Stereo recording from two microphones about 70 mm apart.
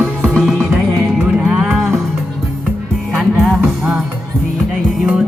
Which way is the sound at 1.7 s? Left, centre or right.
Centre.